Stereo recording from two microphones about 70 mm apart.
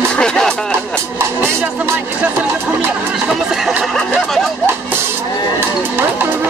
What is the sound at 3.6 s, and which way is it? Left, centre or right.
Speech, centre.